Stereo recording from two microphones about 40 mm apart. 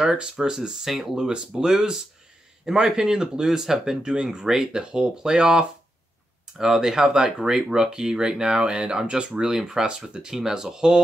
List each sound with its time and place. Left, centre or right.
0.0 s speech: centre
1.1 s speech: right
4.0 s speech: right